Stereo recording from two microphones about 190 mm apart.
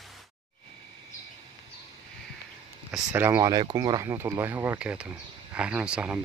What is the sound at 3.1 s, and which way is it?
Speech, 15° right (ahead or behind).